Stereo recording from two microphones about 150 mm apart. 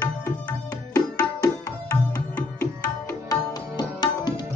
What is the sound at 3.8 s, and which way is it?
Tabla, 25° left (ahead or behind).